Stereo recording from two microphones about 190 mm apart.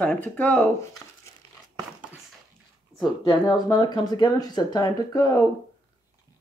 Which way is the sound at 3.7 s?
25° left (ahead or behind).